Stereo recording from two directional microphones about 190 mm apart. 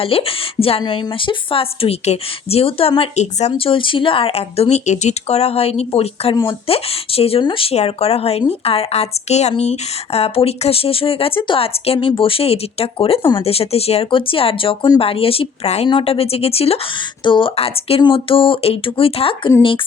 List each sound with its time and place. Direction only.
0.0 s a woman's voice: 30° left (ahead or behind)